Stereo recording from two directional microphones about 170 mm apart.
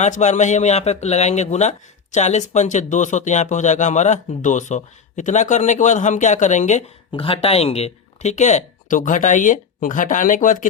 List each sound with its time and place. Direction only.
0.0 s a man's voice: 45° left (ahead or behind)
7.1 s speech: 30° left (ahead or behind); by 10.7 s 50° left (ahead or behind)